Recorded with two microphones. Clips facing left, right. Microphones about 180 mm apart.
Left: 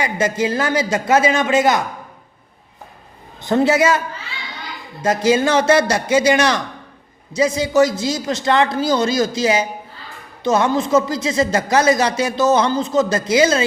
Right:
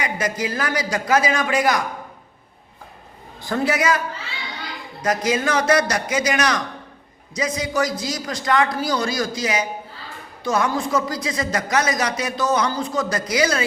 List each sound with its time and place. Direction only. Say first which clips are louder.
0.0 s speech: left 5 dB; 25° left (ahead or behind)
3.4 s speech: left 6 dB; 25° left (ahead or behind)
5.0 s speech: left 5 dB; 30° left (ahead or behind)